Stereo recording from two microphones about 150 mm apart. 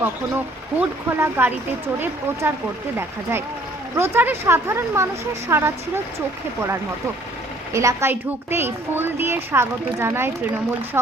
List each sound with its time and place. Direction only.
0.0 s a woman's voice: 15° right (ahead or behind)
3.9 s a woman's voice: 15° right (ahead or behind)